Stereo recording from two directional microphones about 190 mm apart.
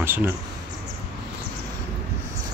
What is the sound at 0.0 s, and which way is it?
Speech, 10° right (ahead or behind).